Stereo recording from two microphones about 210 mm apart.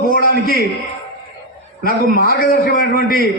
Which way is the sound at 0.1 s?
45° left (ahead or behind).